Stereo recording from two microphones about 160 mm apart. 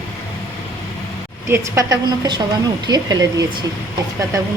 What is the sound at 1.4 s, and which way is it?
A woman's voice, 15° right (ahead or behind).